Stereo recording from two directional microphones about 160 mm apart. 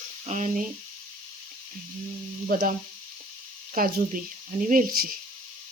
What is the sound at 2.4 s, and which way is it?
Frying, 60° right (ahead or behind).